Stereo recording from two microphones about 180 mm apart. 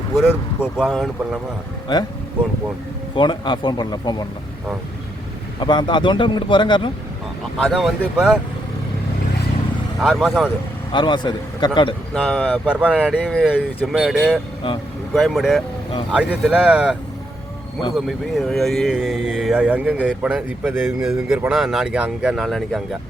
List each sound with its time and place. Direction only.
0.8 s speech: centre (ahead or behind)
1.9 s speech: 25° left (ahead or behind)
3.2 s speech: 25° left (ahead or behind)
5.5 s speech: 25° left (ahead or behind)
7.6 s speech: centre (ahead or behind)
10.0 s speech: centre (ahead or behind)
10.9 s speech: 25° left (ahead or behind)
12.1 s speech: 5° left (ahead or behind)
12.6 s speech: 5° right (ahead or behind)